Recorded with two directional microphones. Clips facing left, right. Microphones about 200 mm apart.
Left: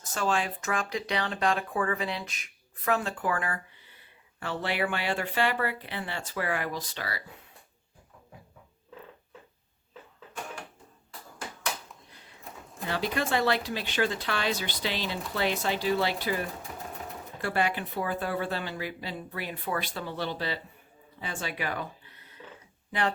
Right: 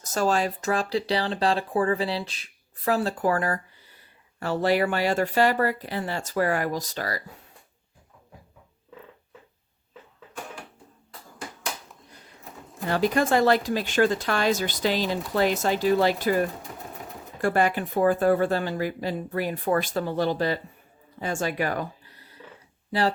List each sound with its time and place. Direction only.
0.0 s speech: 40° right (ahead or behind)
12.9 s speech: 45° right (ahead or behind)